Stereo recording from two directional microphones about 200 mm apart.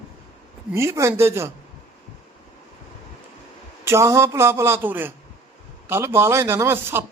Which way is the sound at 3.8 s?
15° right (ahead or behind).